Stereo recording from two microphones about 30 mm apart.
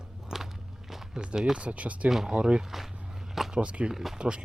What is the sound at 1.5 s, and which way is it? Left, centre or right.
Speech, right.